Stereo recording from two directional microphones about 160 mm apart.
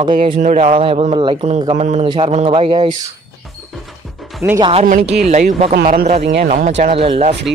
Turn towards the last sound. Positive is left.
turn(degrees=-40)  # may be behind; listen again after turning